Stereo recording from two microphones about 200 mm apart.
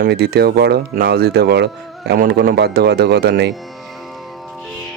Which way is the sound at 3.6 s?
Centre (ahead or behind).